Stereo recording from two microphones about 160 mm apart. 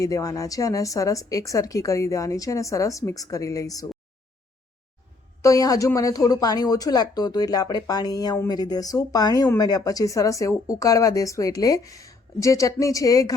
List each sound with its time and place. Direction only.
0.0 s speech: 20° left (ahead or behind)
5.4 s speech: 20° left (ahead or behind)